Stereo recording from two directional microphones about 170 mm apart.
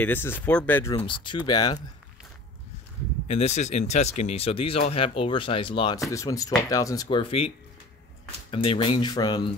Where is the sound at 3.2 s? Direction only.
40° left (ahead or behind).